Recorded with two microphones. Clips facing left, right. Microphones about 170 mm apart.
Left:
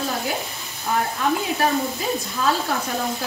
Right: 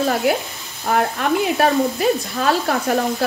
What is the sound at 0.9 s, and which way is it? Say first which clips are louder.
Sizzle: right 4 dB; 65° right (ahead or behind).